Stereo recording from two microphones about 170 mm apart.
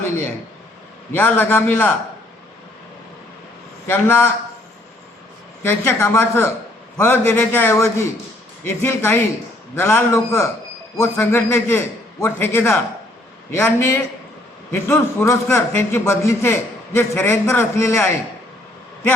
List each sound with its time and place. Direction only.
1.1 s a man's voice: 10° left (ahead or behind)
3.8 s a man's voice: 15° left (ahead or behind)
5.6 s a man's voice: 15° left (ahead or behind)